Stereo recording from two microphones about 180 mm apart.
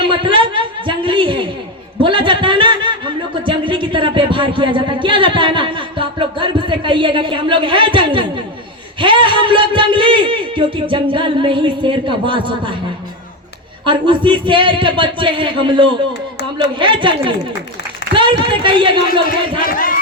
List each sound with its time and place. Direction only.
0.0 s a woman's voice: 25° right (ahead or behind)
13.8 s a man's voice: 25° right (ahead or behind)
19.6 s crowd: 50° left (ahead or behind)